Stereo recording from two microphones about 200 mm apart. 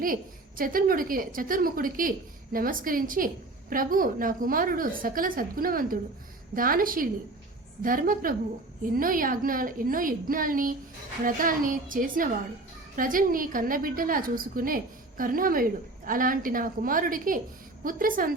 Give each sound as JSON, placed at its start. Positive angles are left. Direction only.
{"t": 0.0, "sound": "a woman's voice", "side_deg": -45}